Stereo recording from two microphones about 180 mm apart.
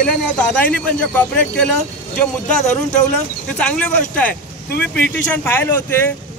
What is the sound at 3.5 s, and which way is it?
Speech, 5° left (ahead or behind).